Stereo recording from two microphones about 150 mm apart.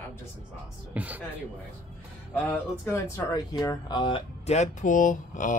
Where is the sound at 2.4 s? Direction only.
15° left (ahead or behind); by 5.5 s 60° left (ahead or behind).